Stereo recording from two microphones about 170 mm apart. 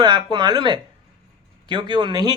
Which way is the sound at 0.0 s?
25° right (ahead or behind).